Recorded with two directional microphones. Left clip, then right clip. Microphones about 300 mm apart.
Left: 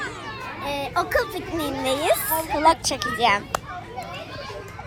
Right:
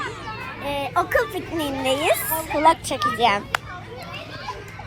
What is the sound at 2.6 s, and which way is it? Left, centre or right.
Speech, centre.